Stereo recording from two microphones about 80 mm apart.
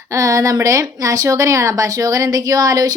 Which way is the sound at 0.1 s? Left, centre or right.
Right.